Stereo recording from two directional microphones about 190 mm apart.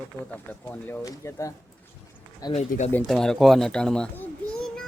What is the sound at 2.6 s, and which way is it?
Speech, 35° left (ahead or behind).